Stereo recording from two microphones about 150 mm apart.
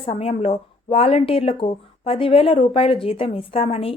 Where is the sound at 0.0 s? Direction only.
40° left (ahead or behind).